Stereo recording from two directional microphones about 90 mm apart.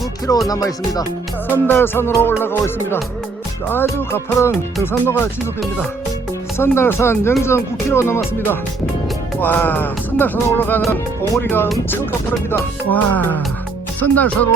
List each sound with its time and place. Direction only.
0.4 s music: 45° left (ahead or behind)
1.5 s music: 20° left (ahead or behind)
6.6 s music: 25° left (ahead or behind)